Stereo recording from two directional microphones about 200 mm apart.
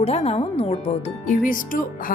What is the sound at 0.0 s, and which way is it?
Speech, 30° left (ahead or behind).